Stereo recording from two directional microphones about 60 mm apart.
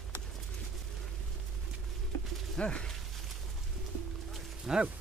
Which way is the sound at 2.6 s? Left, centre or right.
Centre.